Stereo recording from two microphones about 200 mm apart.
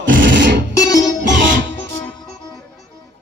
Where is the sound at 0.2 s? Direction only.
65° right (ahead or behind).